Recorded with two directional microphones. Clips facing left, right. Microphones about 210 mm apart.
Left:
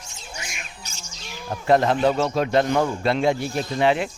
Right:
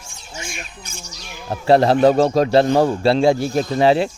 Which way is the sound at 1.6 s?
35° right (ahead or behind).